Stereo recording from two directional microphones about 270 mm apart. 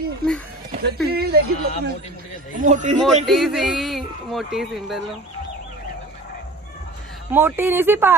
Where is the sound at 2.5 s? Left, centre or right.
Right.